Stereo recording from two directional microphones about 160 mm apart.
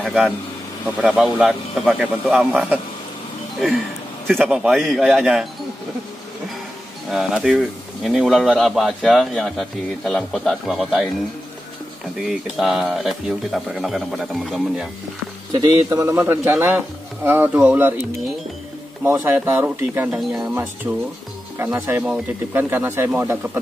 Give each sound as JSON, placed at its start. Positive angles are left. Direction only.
{"t": 0.0, "sound": "a man's voice", "side_deg": -5}
{"t": 4.3, "sound": "speech", "side_deg": 0}
{"t": 7.1, "sound": "speech", "side_deg": 0}
{"t": 12.3, "sound": "speech", "side_deg": 0}
{"t": 15.6, "sound": "a man's voice", "side_deg": -20}
{"t": 19.0, "sound": "a man's voice", "side_deg": -15}
{"t": 20.2, "sound": "speech", "side_deg": 0}
{"t": 20.9, "sound": "a man's voice", "side_deg": -15}